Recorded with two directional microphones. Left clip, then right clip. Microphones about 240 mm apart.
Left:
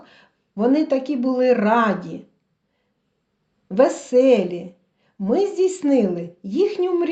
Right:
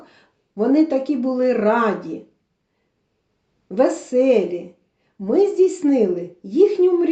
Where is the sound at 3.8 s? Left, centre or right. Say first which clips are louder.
Left 1 dB; left.